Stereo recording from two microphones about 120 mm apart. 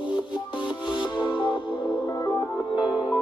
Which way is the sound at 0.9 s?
40° left (ahead or behind).